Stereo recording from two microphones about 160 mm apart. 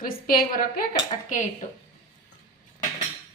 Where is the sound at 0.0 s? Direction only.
60° left (ahead or behind).